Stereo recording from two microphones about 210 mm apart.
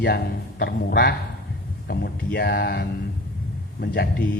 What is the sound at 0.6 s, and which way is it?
A man's voice, 45° left (ahead or behind).